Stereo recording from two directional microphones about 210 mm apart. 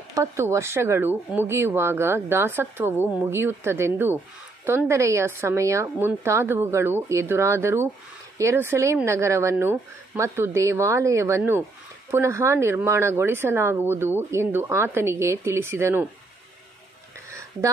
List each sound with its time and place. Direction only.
0.1 s speech: 15° right (ahead or behind)